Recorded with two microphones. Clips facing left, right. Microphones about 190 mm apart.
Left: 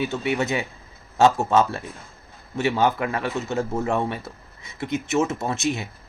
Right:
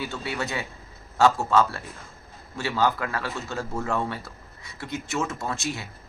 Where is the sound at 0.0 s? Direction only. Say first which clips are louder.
Left 7 dB; 20° left (ahead or behind).